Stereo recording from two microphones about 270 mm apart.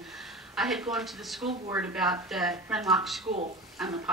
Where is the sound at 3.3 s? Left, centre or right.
Right.